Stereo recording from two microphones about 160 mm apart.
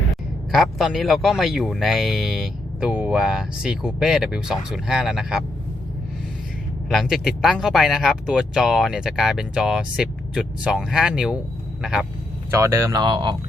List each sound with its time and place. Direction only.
0.5 s speech: centre (ahead or behind)
6.9 s speech: centre (ahead or behind)
12.5 s speech: 15° right (ahead or behind)